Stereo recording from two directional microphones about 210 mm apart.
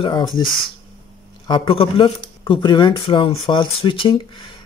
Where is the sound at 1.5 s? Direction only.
25° left (ahead or behind).